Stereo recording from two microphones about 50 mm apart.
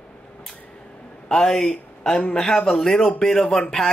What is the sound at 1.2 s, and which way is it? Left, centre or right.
A man's voice, centre.